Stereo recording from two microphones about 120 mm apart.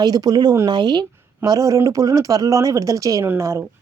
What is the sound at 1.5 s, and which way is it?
Speech, 30° right (ahead or behind).